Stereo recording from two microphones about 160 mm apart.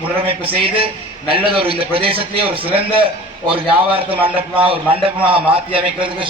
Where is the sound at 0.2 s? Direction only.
35° right (ahead or behind).